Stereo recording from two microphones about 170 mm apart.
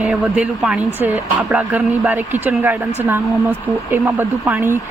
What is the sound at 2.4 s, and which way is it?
Speech, 15° right (ahead or behind).